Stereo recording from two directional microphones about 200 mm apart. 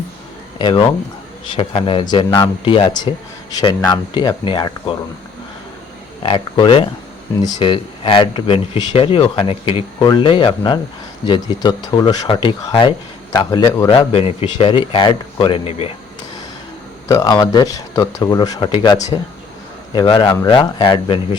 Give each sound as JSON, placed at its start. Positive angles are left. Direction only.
{"t": 0.6, "sound": "speech", "side_deg": 25}
{"t": 6.2, "sound": "speech", "side_deg": 25}
{"t": 17.1, "sound": "speech", "side_deg": 20}